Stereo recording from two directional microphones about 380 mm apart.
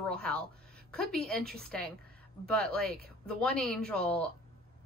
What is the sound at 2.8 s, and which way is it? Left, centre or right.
Speech, right.